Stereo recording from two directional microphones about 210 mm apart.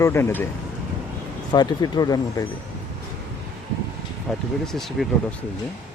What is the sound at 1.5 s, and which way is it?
Speech, 20° left (ahead or behind).